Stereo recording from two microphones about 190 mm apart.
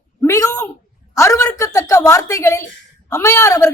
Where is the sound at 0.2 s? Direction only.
15° left (ahead or behind).